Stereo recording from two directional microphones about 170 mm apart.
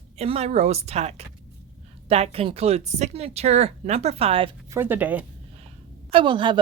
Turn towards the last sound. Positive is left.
turn(degrees=-30)  # may be behind; listen again after turning